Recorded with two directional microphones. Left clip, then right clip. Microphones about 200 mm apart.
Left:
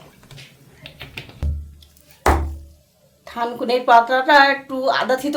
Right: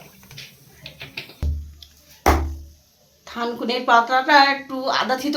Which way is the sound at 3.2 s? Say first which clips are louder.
Left 3 dB; 15° left (ahead or behind).